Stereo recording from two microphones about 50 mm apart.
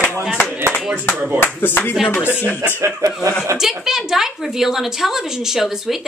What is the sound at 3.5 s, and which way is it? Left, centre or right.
A woman's voice, centre.